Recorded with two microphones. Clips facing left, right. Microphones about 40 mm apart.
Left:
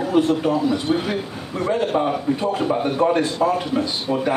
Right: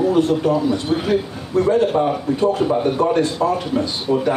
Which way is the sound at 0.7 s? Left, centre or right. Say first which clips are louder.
Right 3 dB; centre.